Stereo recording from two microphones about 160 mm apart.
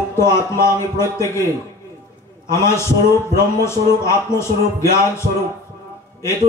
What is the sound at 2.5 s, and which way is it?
A man's voice, 15° left (ahead or behind).